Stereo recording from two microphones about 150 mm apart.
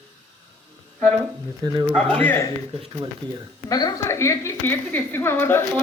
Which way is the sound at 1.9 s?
10° left (ahead or behind).